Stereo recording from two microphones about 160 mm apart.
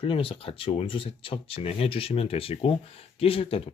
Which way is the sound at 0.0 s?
35° left (ahead or behind).